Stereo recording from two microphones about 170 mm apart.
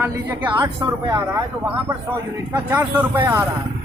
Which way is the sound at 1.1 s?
20° right (ahead or behind).